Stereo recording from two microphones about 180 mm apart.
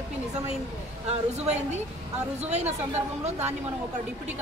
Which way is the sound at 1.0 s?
40° right (ahead or behind).